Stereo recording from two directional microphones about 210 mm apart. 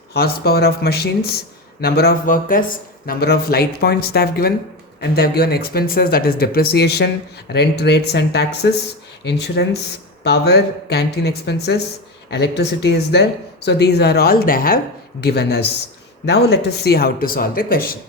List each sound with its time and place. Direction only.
0.1 s speech: 50° left (ahead or behind)